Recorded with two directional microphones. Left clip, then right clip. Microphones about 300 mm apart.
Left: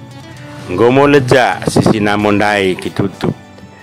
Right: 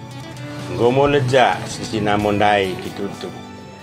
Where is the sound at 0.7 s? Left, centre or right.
Left.